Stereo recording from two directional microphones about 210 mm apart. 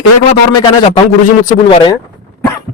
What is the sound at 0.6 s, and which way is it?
Speech, 30° left (ahead or behind).